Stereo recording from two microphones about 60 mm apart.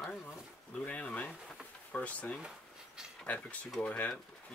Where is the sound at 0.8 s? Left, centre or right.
Left.